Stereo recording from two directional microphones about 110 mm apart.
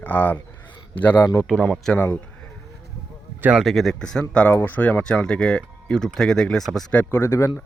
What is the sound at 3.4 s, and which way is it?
Speech, 15° right (ahead or behind).